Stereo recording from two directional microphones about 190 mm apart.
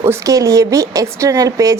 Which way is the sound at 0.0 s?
15° right (ahead or behind).